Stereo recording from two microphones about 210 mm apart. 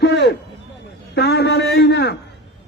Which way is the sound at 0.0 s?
55° left (ahead or behind).